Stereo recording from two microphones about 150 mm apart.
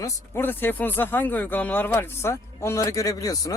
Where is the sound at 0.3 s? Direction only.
15° left (ahead or behind).